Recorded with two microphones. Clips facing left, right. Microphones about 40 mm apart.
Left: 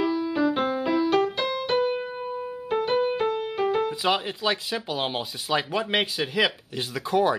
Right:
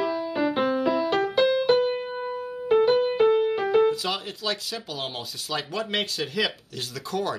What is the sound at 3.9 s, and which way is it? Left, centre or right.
Speech, left.